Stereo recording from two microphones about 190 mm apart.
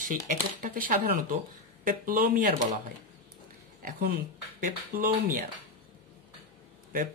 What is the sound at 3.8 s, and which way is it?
Speech, 55° right (ahead or behind).